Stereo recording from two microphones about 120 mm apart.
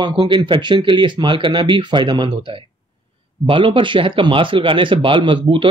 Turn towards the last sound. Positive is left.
turn(degrees=-45)  # may be behind; listen again after turning